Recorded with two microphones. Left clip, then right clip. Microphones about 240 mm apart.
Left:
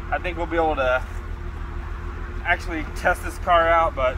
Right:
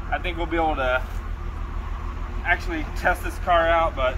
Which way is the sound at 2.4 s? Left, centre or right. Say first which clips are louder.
Even; centre.